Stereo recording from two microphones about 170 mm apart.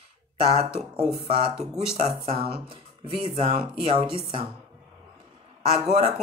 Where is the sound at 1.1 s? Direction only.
35° right (ahead or behind).